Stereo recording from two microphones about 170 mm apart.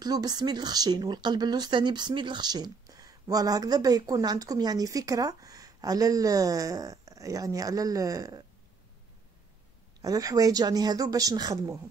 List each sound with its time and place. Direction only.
0.0 s speech: 25° right (ahead or behind)
10.0 s speech: 20° right (ahead or behind)